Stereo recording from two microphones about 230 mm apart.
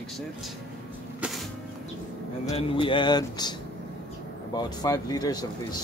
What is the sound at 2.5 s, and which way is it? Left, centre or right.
Speech, left.